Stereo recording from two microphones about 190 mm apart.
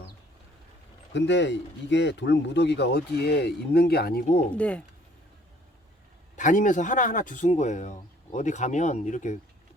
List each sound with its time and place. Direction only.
1.1 s speech: 70° left (ahead or behind)
4.5 s speech: 5° left (ahead or behind)
6.3 s speech: 40° left (ahead or behind)